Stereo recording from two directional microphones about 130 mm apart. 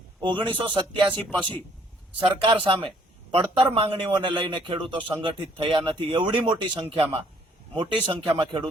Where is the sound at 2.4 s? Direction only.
40° right (ahead or behind).